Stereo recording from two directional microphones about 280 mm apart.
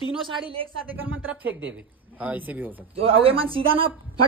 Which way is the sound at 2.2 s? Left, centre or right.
Centre.